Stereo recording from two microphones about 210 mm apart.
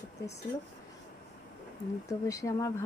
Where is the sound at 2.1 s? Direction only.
15° left (ahead or behind).